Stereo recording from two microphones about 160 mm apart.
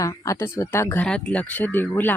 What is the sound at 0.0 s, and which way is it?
Speech, 20° left (ahead or behind).